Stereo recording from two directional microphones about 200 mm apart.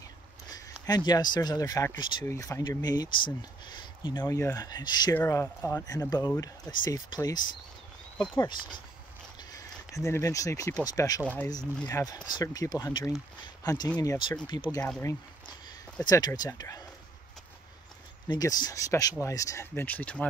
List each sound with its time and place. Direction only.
0.5 s speech: 20° left (ahead or behind)
18.3 s speech: 20° left (ahead or behind)